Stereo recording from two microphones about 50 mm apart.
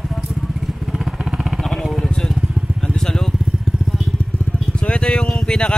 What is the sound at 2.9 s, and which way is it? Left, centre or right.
Vehicle, centre.